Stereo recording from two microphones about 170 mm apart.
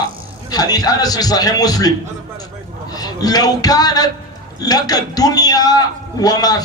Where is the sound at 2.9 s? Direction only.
20° left (ahead or behind).